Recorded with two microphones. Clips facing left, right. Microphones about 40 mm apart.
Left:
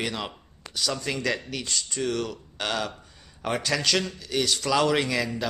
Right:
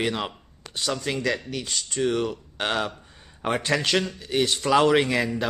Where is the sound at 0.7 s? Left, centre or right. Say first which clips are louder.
Right 1 dB; right.